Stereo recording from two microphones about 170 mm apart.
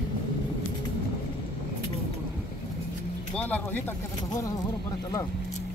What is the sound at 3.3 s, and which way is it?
Speech, 10° left (ahead or behind).